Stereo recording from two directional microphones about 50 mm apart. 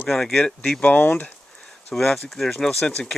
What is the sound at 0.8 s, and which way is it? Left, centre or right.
Speech, left.